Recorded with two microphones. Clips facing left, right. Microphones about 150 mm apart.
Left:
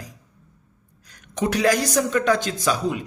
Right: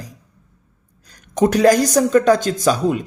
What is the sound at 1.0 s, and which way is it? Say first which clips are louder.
Speech: right 8 dB; 45° right (ahead or behind).